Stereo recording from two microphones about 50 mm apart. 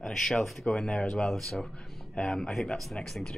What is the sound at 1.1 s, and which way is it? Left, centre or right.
Speech, centre.